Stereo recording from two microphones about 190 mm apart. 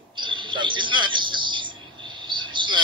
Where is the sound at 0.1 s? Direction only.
25° right (ahead or behind).